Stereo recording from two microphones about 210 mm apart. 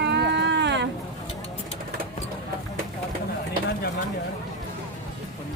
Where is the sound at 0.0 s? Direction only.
55° right (ahead or behind).